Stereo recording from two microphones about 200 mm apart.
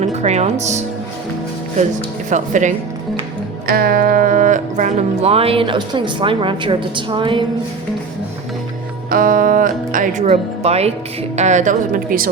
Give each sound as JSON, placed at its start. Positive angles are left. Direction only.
{"t": 0.0, "sound": "speech", "side_deg": -35}
{"t": 2.3, "sound": "speech", "side_deg": -40}
{"t": 9.0, "sound": "speech", "side_deg": -45}